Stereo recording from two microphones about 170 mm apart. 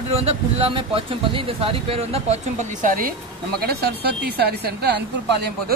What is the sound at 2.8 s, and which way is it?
Speech, 55° right (ahead or behind).